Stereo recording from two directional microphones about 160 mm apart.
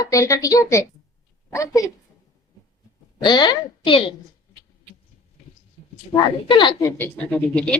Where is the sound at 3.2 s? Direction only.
30° left (ahead or behind).